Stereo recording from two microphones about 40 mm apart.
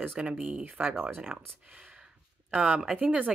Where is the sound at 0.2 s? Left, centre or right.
Right.